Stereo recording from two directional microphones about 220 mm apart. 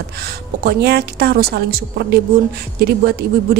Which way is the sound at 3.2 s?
45° right (ahead or behind).